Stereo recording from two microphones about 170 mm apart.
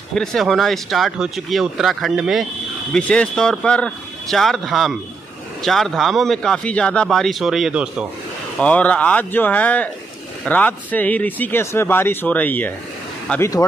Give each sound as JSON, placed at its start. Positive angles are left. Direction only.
{"t": 0.1, "sound": "speech", "side_deg": 5}
{"t": 8.5, "sound": "speech", "side_deg": 5}